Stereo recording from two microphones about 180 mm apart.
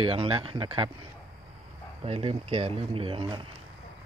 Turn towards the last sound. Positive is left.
turn(degrees=-30)  # may be behind; listen again after turning